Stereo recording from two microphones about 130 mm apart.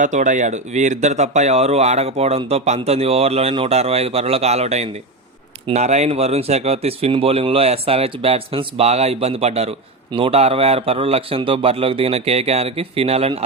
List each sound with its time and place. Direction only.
0.0 s speech: 70° right (ahead or behind); by 13.4 s 50° right (ahead or behind)